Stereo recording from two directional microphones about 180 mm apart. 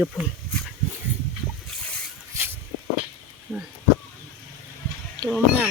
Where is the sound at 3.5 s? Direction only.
Centre (ahead or behind).